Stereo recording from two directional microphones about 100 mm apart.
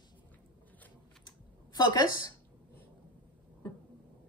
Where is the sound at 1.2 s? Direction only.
45° left (ahead or behind).